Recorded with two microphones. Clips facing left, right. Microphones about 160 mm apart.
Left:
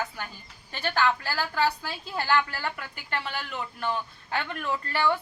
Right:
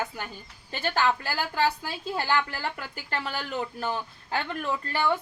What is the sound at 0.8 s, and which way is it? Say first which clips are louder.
A woman's voice: even; 20° right (ahead or behind).